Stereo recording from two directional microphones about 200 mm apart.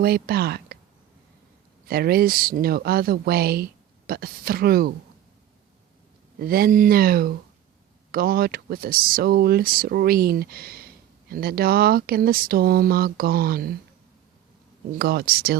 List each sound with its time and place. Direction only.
0.0 s speech: 50° right (ahead or behind)
1.9 s speech: 50° right (ahead or behind)
6.4 s speech: 50° right (ahead or behind)
14.9 s speech: 50° right (ahead or behind)